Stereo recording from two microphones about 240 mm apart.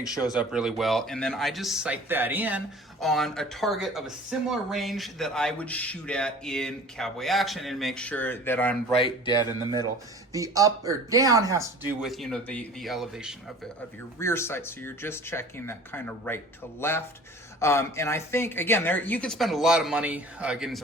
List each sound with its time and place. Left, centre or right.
0.3 s speech: centre
9.0 s speech: left
10.3 s speech: centre
12.0 s speech: centre
14.2 s speech: centre